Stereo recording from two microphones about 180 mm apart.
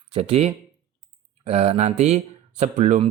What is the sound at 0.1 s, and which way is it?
Speech, 35° right (ahead or behind).